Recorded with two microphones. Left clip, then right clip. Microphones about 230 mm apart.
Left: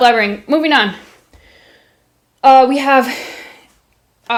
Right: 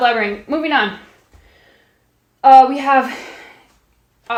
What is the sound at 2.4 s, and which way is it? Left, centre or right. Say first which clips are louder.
Speech: even; left.